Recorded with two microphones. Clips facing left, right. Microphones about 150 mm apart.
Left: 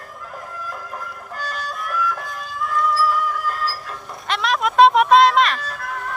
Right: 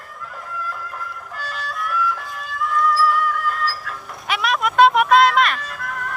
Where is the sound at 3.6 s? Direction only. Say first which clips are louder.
Right 1 dB; centre (ahead or behind).